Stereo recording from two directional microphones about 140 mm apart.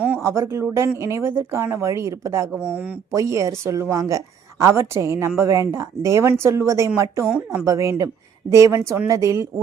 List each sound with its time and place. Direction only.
0.0 s speech: 15° right (ahead or behind)
2.5 s speech: 10° right (ahead or behind)
3.1 s speech: 20° right (ahead or behind)
7.3 s speech: 10° right (ahead or behind)
7.6 s speech: 20° right (ahead or behind)